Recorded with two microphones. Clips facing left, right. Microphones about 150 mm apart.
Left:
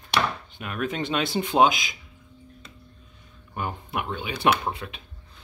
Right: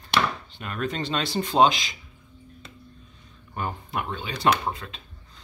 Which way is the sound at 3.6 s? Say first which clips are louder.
Even; 10° left (ahead or behind).